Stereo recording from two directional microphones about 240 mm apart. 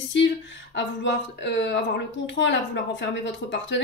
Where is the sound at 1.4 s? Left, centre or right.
Left.